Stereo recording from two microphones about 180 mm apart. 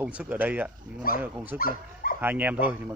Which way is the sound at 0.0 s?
10° right (ahead or behind).